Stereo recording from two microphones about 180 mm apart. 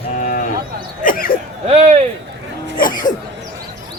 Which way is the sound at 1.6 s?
40° right (ahead or behind).